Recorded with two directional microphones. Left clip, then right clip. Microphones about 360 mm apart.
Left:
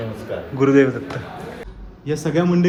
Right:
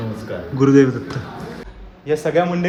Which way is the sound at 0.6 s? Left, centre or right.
Centre.